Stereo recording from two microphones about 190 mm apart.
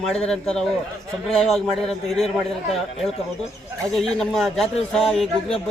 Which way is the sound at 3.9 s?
Centre (ahead or behind).